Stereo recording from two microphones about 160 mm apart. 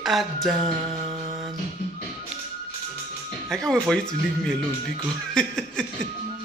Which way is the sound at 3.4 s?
5° left (ahead or behind).